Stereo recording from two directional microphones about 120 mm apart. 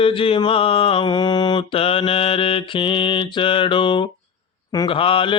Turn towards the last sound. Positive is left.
turn(degrees=50)  # may be behind; listen again after turning